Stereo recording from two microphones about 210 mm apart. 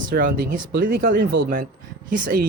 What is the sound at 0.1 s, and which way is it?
Speech, 45° right (ahead or behind).